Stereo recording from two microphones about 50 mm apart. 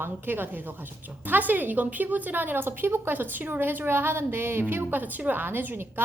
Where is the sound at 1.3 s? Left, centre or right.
Right.